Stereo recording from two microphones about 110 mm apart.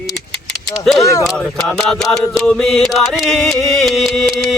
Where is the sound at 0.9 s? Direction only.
30° left (ahead or behind).